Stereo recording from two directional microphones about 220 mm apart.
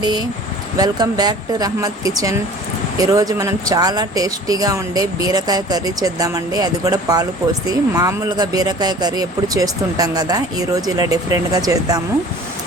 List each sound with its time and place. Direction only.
0.8 s speech: 15° right (ahead or behind)